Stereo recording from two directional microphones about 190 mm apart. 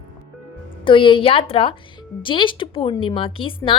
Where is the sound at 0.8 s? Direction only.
25° left (ahead or behind).